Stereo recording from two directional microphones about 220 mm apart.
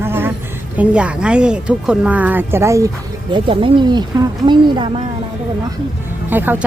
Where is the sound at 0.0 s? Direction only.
10° right (ahead or behind).